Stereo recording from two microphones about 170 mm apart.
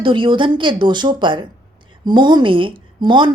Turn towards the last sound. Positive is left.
turn(degrees=-30)  # may be behind; listen again after turning